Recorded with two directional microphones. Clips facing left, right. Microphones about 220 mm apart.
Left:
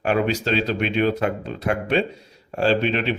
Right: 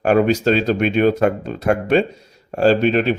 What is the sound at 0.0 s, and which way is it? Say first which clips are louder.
A man's voice: right 7 dB; 45° right (ahead or behind).